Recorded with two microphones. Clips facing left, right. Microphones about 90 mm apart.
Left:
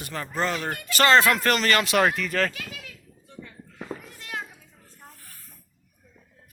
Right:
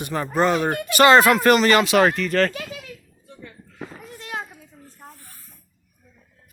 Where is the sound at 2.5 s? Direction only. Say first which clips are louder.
Right 6 dB; 30° right (ahead or behind).